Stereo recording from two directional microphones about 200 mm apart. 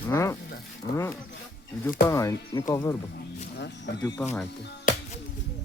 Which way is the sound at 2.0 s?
15° left (ahead or behind).